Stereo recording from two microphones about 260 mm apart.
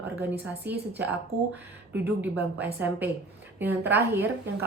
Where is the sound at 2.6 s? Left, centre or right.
Centre.